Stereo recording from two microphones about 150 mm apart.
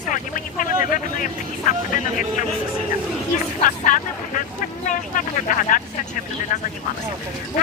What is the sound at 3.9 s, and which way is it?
Vehicle, 60° left (ahead or behind).